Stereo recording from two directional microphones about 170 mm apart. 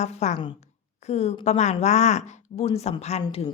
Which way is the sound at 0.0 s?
40° left (ahead or behind).